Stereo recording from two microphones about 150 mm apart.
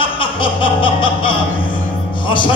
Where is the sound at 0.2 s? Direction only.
35° left (ahead or behind).